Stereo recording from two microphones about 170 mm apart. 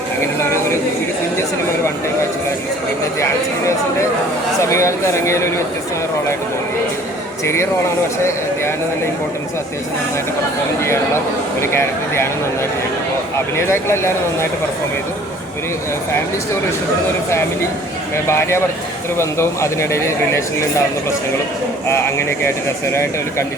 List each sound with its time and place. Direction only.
0.3 s a sound: 15° left (ahead or behind)
4.6 s speech: 15° left (ahead or behind)
7.4 s speech: 15° left (ahead or behind)
10.8 s speech: 15° left (ahead or behind)
13.6 s speech: 15° left (ahead or behind)
18.3 s speech: 15° left (ahead or behind)
22.4 s speech: 15° left (ahead or behind)